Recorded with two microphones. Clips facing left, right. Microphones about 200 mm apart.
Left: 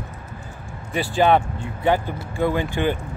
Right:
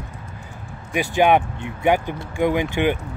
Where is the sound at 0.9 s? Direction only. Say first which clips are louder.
Right 1 dB; 15° right (ahead or behind).